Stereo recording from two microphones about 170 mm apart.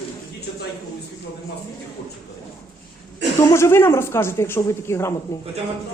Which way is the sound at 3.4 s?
15° left (ahead or behind).